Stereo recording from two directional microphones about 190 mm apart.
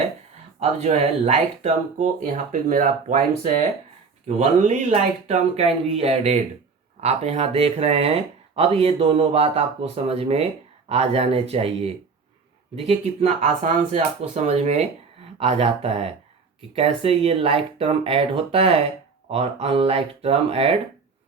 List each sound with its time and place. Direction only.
0.6 s speech: 35° right (ahead or behind)